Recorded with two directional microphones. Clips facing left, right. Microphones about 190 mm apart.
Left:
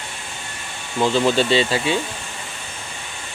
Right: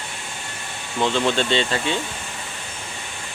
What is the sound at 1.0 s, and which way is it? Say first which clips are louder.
Speech: left 3 dB; 5° left (ahead or behind).